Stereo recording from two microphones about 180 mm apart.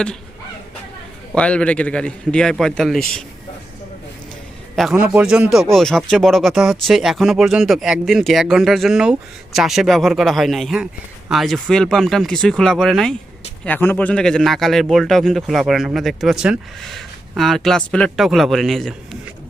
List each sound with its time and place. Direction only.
1.4 s speech: 5° left (ahead or behind)
4.8 s speech: 5° right (ahead or behind)